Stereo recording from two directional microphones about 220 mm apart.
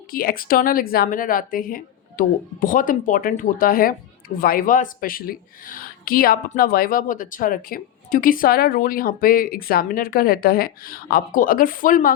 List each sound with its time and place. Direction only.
0.1 s speech: 40° left (ahead or behind)